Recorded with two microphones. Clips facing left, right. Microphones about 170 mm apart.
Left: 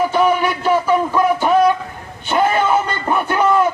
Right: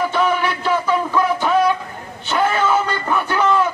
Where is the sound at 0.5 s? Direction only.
15° left (ahead or behind).